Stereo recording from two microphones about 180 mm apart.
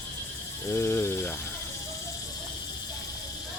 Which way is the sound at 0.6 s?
15° left (ahead or behind).